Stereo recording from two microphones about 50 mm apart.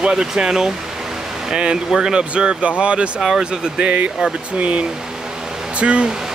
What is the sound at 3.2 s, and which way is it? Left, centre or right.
Speech, centre.